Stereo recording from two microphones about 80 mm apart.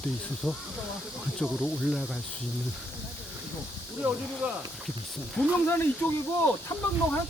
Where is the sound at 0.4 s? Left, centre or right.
Centre.